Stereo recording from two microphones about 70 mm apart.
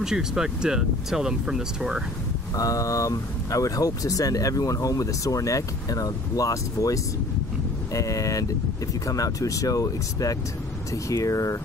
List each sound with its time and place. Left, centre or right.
0.0 s speech: centre
2.5 s speech: left